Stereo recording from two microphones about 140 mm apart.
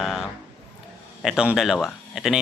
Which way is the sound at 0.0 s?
Centre (ahead or behind).